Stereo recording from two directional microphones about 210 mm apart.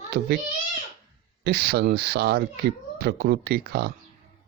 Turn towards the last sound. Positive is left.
turn(degrees=-45)  # may be behind; listen again after turning